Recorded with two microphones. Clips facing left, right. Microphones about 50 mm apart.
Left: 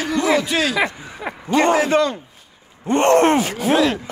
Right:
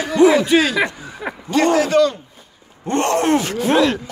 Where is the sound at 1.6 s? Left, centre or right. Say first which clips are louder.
Right 3 dB; left.